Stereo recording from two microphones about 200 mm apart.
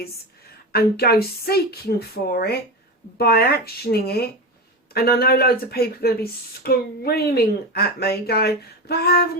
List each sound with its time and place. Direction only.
0.7 s speech: 50° left (ahead or behind)